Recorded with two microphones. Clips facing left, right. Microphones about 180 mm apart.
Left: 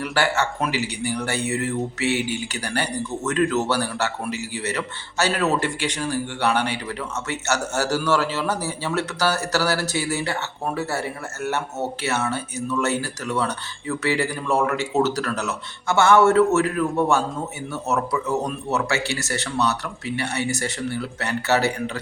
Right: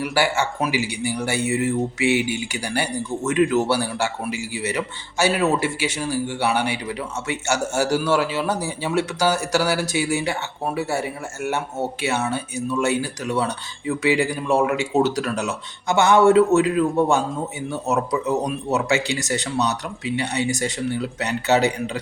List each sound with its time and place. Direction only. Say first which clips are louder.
0.0 s speech: right 1 dB; 10° right (ahead or behind)